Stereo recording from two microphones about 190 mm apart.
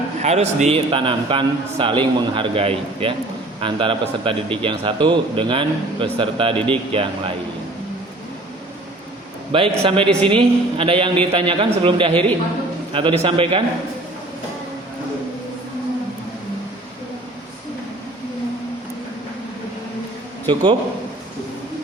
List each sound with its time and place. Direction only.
0.2 s a man's voice: 35° right (ahead or behind)
9.5 s a man's voice: 30° right (ahead or behind)
20.5 s a man's voice: 25° right (ahead or behind)